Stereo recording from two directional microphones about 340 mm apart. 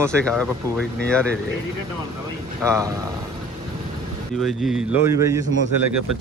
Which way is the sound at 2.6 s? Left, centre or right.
Centre.